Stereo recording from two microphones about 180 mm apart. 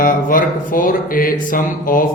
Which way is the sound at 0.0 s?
50° left (ahead or behind).